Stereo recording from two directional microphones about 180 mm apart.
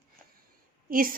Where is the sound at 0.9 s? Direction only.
50° right (ahead or behind).